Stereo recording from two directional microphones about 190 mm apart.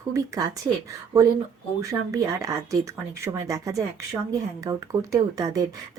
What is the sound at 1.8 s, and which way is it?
Speech, 15° right (ahead or behind).